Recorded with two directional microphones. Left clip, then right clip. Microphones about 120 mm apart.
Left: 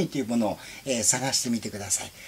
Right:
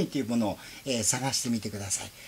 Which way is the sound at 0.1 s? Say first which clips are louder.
Left 3 dB; 10° right (ahead or behind).